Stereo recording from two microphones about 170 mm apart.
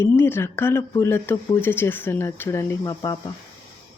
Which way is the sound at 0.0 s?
15° left (ahead or behind).